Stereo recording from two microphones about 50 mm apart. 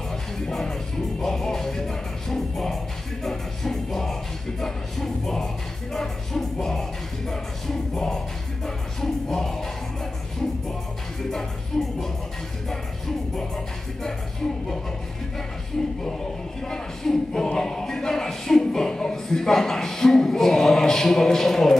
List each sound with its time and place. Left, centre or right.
0.1 s music: centre
11.7 s music: centre
16.6 s music: centre